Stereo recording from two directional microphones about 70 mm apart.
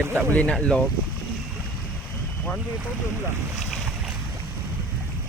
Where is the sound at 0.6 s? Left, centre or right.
Centre.